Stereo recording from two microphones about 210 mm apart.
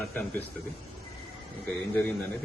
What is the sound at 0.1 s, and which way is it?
Speech, 5° left (ahead or behind).